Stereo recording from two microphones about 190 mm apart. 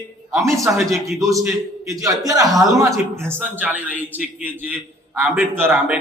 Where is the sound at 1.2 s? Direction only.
15° right (ahead or behind).